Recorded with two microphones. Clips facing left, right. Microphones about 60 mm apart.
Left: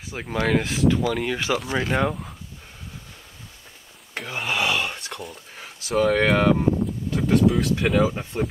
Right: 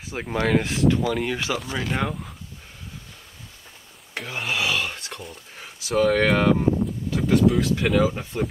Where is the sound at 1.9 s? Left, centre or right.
Centre.